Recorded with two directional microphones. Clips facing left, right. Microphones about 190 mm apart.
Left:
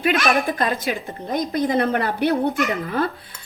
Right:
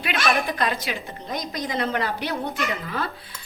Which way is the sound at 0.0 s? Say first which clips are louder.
Left 5 dB; 45° left (ahead or behind).